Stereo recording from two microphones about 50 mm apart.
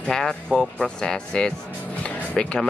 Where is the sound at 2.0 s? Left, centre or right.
Centre.